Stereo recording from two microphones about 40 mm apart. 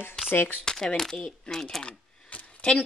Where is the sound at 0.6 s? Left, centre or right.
Centre.